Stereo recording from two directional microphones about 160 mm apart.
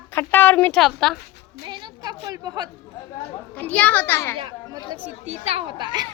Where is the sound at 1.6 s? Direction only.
30° right (ahead or behind).